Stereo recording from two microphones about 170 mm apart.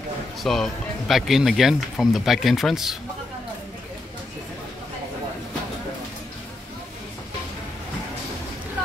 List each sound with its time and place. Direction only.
0.4 s speech: centre (ahead or behind)